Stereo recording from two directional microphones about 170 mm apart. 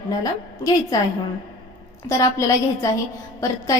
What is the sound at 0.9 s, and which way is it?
A woman's voice, 20° left (ahead or behind).